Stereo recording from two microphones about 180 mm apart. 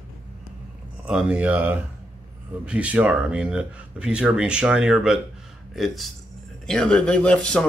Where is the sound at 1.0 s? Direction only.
5° right (ahead or behind).